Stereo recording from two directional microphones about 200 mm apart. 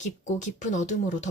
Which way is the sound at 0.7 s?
35° left (ahead or behind).